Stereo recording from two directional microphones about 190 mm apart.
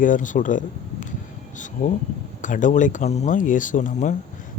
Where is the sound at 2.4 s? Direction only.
40° left (ahead or behind).